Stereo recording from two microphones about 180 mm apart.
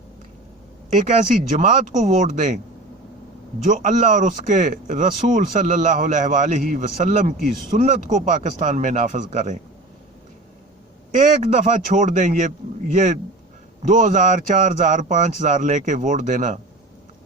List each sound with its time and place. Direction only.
0.9 s a man's voice: 45° right (ahead or behind)
3.7 s a man's voice: 45° right (ahead or behind)
11.1 s a man's voice: 45° right (ahead or behind)